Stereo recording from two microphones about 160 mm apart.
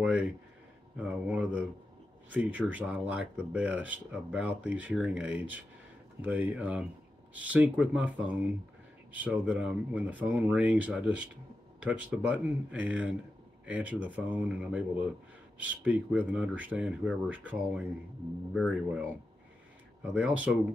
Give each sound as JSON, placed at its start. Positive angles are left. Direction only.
{"t": 0.0, "sound": "a sound", "side_deg": -5}
{"t": 0.9, "sound": "speech", "side_deg": -10}
{"t": 20.0, "sound": "speech", "side_deg": -10}